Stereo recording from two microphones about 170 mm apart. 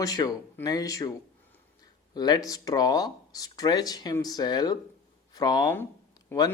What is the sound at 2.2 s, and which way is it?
Speech, 25° left (ahead or behind).